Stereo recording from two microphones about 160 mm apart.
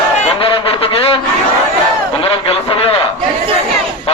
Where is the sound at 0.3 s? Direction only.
35° left (ahead or behind).